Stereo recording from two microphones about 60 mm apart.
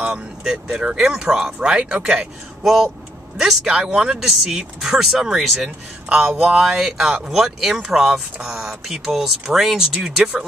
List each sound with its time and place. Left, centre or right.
0.0 s speech: centre
2.6 s speech: centre